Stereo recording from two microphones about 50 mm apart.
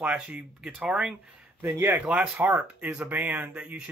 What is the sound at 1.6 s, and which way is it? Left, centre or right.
Speech, right.